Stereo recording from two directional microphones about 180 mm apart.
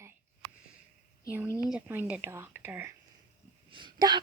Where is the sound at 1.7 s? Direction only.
10° right (ahead or behind).